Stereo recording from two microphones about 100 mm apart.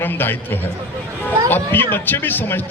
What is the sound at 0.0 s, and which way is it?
A man's voice, 20° left (ahead or behind).